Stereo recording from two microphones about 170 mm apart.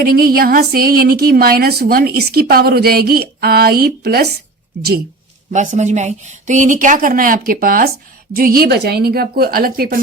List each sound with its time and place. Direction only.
0.0 s a woman's voice: 60° right (ahead or behind)
5.5 s a woman's voice: 45° right (ahead or behind); by 10.0 s 60° right (ahead or behind)